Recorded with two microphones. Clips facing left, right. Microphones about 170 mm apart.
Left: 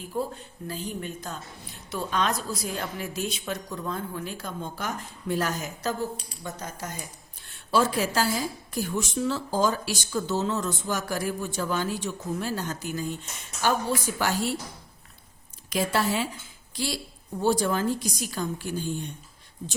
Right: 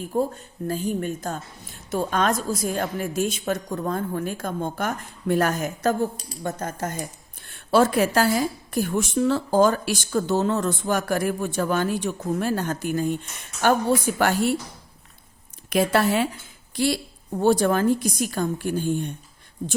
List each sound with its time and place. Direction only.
0.1 s a woman's voice: 45° right (ahead or behind)
15.7 s a woman's voice: 60° right (ahead or behind)